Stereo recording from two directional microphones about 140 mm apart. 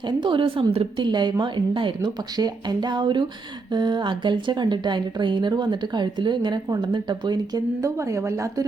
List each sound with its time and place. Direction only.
0.2 s a woman's voice: 35° right (ahead or behind)